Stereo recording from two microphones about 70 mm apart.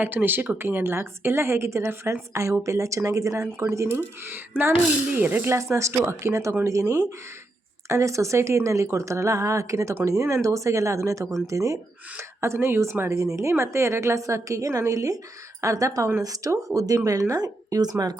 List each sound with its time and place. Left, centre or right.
0.0 s a woman's voice: right
5.7 s a woman's voice: right
12.4 s a woman's voice: right